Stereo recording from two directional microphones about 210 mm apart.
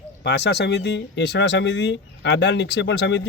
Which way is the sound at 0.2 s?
55° left (ahead or behind).